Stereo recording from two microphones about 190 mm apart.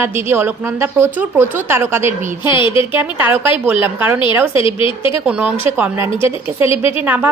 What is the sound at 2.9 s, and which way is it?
A woman's voice, 10° right (ahead or behind).